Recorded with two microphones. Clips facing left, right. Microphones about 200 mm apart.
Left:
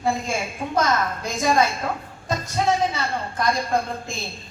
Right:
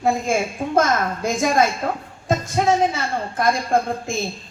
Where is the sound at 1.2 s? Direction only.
50° right (ahead or behind).